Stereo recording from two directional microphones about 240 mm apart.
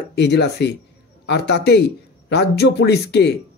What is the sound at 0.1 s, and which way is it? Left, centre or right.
A man's voice, left.